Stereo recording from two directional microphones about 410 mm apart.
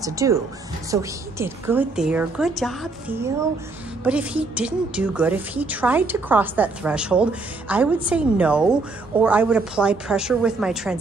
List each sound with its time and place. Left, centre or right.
0.0 s a woman's voice: centre